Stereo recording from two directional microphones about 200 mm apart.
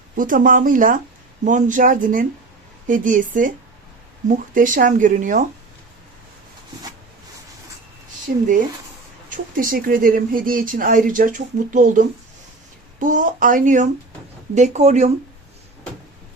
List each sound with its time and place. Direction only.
0.2 s speech: 40° right (ahead or behind)
8.3 s speech: 50° right (ahead or behind)